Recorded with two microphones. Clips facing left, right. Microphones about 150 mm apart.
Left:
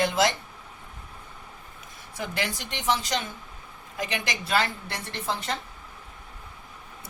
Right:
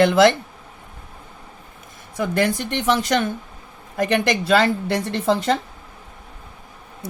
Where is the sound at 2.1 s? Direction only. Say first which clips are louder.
Right 11 dB; 50° right (ahead or behind); by 5.5 s 80° right.